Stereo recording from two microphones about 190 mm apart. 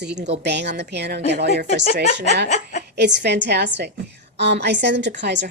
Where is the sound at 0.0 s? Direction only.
65° right (ahead or behind).